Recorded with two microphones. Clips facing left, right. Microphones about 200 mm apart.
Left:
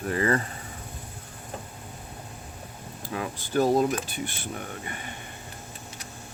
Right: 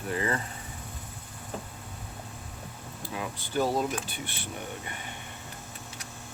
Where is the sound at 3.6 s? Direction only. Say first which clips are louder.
Left 5 dB; 45° left (ahead or behind).